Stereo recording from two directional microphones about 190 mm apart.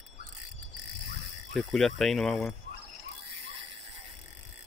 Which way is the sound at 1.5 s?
Centre (ahead or behind).